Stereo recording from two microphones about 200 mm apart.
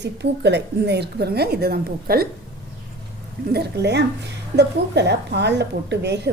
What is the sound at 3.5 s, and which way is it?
A woman's voice, 55° right (ahead or behind).